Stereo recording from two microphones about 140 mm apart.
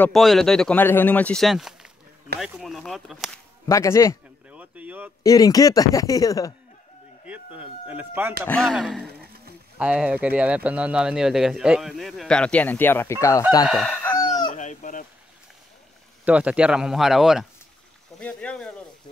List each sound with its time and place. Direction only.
0.1 s speech: centre (ahead or behind)
3.6 s speech: 20° left (ahead or behind)
4.5 s a sound: 10° right (ahead or behind)
5.2 s speech: 25° left (ahead or behind)
7.2 s speech: 10° right (ahead or behind)
8.5 s speech: 5° left (ahead or behind)
9.8 s speech: 10° right (ahead or behind); by 13.4 s 20° left (ahead or behind)
13.7 s speech: 5° left (ahead or behind)
14.1 s chicken: 30° left (ahead or behind)
14.5 s speech: 60° left (ahead or behind)
16.3 s speech: 10° right (ahead or behind); by 18.7 s 10° left (ahead or behind)